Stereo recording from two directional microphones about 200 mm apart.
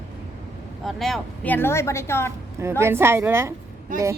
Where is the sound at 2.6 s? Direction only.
15° right (ahead or behind).